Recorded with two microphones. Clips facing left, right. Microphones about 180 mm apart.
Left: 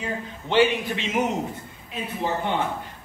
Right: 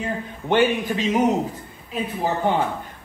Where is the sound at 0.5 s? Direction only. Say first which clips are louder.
Right 1 dB; 45° right (ahead or behind).